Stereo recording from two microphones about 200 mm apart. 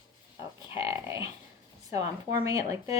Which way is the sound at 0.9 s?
15° right (ahead or behind).